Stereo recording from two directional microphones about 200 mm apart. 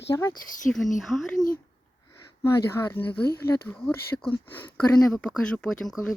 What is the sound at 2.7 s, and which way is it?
Speech, 10° left (ahead or behind).